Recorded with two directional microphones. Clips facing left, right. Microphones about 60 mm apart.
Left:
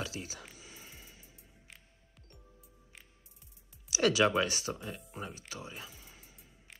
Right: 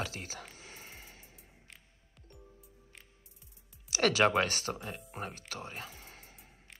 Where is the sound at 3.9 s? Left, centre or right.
Right.